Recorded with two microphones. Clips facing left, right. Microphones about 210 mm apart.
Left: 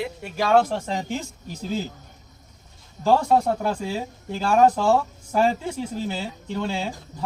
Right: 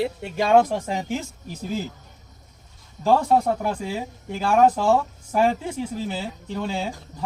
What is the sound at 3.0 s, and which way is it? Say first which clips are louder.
Speech: even; 5° right (ahead or behind).